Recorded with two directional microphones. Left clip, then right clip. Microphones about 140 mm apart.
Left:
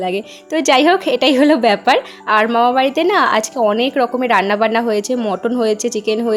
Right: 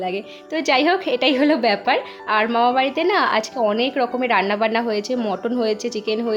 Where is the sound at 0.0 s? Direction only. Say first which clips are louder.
Left 5 dB; 35° left (ahead or behind).